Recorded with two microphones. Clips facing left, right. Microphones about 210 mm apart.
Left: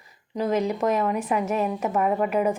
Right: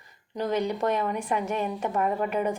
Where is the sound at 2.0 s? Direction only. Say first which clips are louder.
Left 3 dB; 55° left (ahead or behind).